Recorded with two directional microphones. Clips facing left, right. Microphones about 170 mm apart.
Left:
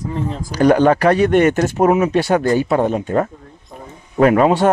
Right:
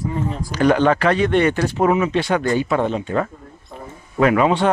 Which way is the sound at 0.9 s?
40° left (ahead or behind).